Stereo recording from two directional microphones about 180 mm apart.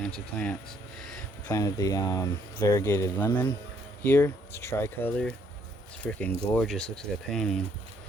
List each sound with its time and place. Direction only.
0.3 s speech: 5° left (ahead or behind)
1.5 s speech: 20° left (ahead or behind); by 7.6 s 5° left (ahead or behind)